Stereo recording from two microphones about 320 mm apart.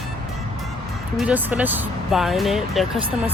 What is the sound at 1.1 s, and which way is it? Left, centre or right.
Speech, centre.